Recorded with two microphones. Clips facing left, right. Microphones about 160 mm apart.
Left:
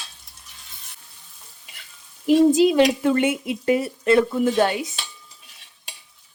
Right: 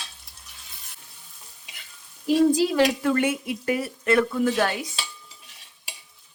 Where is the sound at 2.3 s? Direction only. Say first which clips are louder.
Left 4 dB; 20° left (ahead or behind).